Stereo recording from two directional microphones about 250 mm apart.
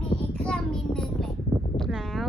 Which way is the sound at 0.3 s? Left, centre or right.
Centre.